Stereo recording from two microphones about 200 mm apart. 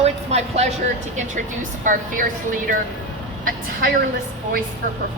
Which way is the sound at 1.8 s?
40° right (ahead or behind).